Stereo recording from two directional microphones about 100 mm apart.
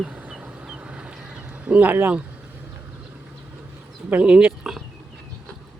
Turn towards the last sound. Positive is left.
turn(degrees=-10)  # may be behind; listen again after turning